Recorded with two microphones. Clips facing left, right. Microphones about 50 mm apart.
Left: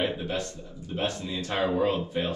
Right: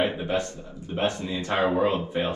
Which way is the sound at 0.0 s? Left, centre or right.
Right.